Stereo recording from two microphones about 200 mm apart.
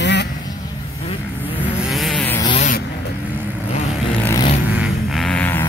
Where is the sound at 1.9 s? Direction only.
Centre (ahead or behind).